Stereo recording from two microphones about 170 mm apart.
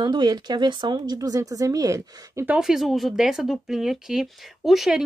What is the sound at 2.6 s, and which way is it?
Speech, centre (ahead or behind).